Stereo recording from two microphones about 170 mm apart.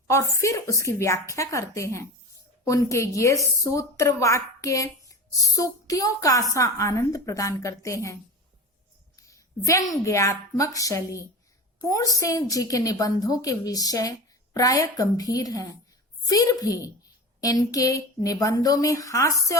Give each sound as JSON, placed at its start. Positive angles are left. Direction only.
{"t": 0.1, "sound": "a woman's voice", "side_deg": 15}
{"t": 9.1, "sound": "a woman's voice", "side_deg": 20}